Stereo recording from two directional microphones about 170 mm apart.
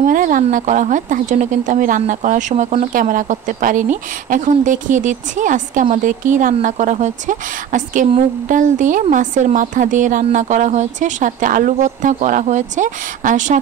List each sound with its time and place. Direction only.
0.0 s speech: 55° right (ahead or behind)